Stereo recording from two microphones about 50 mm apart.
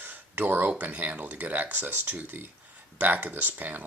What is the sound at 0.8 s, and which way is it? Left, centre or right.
Speech, right.